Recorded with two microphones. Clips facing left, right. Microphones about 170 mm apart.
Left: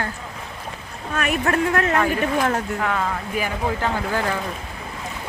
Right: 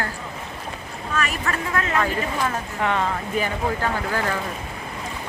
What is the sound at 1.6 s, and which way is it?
Speech, 65° left (ahead or behind).